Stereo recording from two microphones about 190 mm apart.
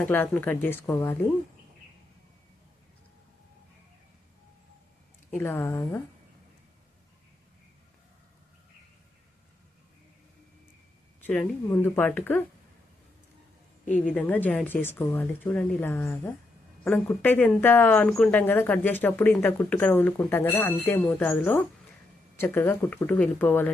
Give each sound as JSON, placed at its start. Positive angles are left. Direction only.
{"t": 0.0, "sound": "speech", "side_deg": 10}
{"t": 5.3, "sound": "speech", "side_deg": 10}
{"t": 11.2, "sound": "a woman's voice", "side_deg": 5}
{"t": 13.8, "sound": "speech", "side_deg": 40}
{"t": 14.1, "sound": "speech", "side_deg": 10}